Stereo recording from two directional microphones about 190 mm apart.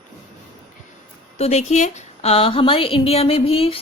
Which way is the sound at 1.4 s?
35° left (ahead or behind).